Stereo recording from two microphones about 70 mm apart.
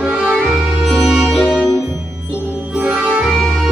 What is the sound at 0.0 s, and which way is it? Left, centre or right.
Music, centre.